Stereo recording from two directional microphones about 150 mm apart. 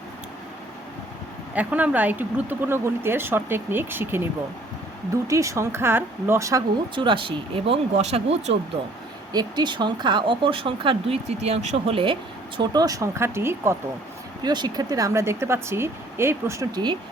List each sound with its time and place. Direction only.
1.5 s speech: 10° right (ahead or behind)
5.3 s speech: 20° right (ahead or behind)
6.9 s speech: 35° right (ahead or behind)
9.3 s speech: 25° right (ahead or behind)
12.5 s speech: 25° right (ahead or behind)
14.4 s speech: 30° right (ahead or behind)